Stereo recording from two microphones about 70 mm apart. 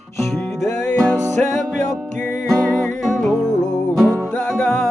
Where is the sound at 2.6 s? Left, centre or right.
Centre.